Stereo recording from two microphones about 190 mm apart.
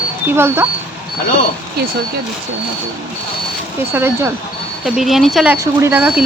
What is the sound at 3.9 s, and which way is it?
Speech, 10° right (ahead or behind).